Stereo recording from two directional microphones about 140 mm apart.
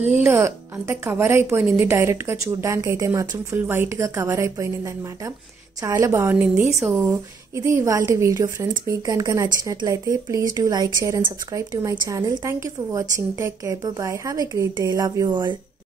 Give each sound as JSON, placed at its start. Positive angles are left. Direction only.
{"t": 0.2, "sound": "a woman's voice", "side_deg": -20}
{"t": 6.9, "sound": "a woman's voice", "side_deg": -20}